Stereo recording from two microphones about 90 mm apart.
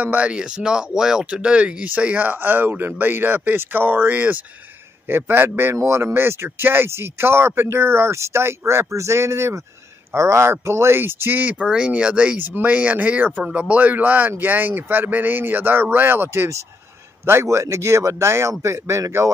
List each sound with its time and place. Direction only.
0.0 s a man's voice: 15° right (ahead or behind); by 19.3 s 35° right (ahead or behind)